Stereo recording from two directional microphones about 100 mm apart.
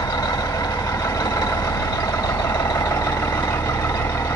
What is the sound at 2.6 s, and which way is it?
Vehicle, 30° left (ahead or behind).